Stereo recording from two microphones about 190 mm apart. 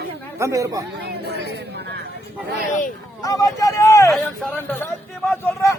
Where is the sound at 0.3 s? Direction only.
15° right (ahead or behind).